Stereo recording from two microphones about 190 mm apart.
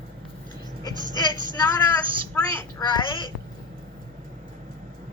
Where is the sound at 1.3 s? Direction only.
25° right (ahead or behind).